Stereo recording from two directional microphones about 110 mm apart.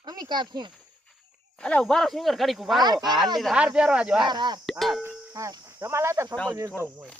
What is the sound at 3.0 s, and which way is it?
Speech, centre (ahead or behind).